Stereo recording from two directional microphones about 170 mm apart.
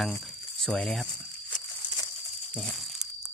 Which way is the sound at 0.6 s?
5° left (ahead or behind).